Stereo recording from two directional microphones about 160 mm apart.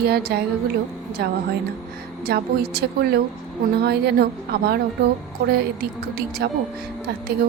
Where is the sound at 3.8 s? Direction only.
85° right.